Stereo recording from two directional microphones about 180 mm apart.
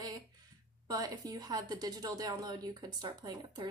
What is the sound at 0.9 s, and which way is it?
A woman's voice, 20° right (ahead or behind).